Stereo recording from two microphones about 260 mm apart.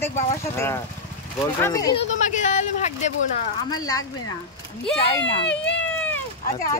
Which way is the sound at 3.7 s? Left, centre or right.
Centre.